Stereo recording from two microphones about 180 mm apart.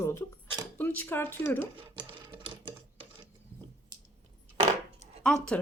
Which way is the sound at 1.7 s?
30° right (ahead or behind).